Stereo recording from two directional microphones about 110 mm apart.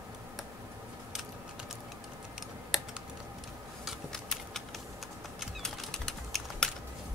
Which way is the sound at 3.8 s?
5° left (ahead or behind).